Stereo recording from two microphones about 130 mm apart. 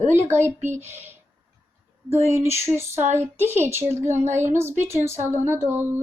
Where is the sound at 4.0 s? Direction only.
60° right (ahead or behind).